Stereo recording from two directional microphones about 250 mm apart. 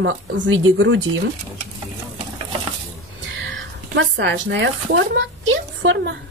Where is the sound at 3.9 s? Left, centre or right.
Right.